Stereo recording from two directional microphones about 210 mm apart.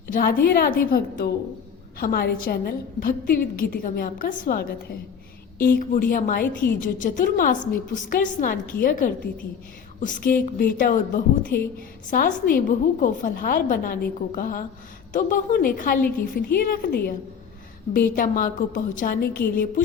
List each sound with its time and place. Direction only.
0.1 s a woman's voice: 45° left (ahead or behind)